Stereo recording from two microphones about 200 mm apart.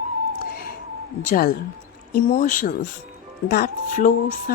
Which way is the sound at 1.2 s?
45° left (ahead or behind).